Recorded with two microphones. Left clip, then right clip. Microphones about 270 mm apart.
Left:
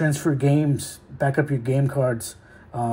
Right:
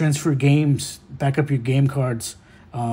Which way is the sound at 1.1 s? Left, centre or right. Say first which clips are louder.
Left 1 dB; right.